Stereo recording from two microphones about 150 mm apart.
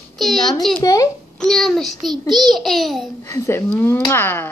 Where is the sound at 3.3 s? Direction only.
15° left (ahead or behind).